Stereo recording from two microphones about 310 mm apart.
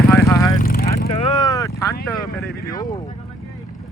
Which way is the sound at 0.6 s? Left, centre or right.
Left.